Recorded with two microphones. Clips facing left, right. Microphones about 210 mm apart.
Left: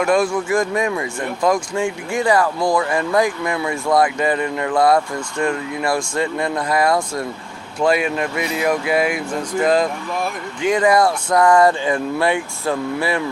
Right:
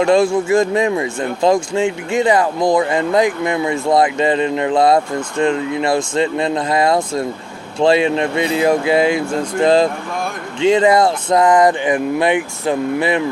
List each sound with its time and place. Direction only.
0.0 s speech: 25° right (ahead or behind)